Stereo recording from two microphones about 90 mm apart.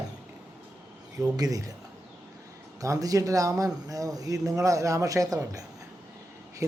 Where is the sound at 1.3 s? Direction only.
40° right (ahead or behind).